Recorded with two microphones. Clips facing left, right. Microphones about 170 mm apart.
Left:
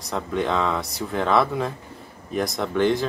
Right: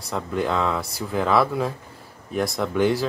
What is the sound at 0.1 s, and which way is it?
Speech, centre (ahead or behind).